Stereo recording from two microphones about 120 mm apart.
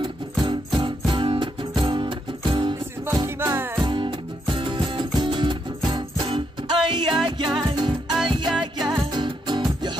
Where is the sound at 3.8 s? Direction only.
40° right (ahead or behind).